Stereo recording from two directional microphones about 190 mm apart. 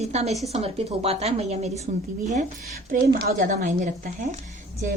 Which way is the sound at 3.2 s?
50° right (ahead or behind).